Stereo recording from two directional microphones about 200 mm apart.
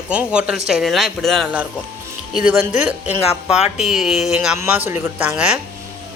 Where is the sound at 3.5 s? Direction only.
35° left (ahead or behind).